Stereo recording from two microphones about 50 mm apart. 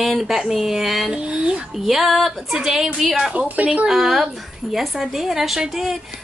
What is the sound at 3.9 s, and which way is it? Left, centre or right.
A woman's voice, centre.